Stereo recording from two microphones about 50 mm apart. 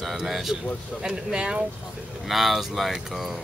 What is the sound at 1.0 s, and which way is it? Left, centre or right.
Speech, centre.